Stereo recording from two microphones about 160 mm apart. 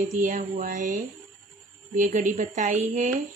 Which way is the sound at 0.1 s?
55° right (ahead or behind).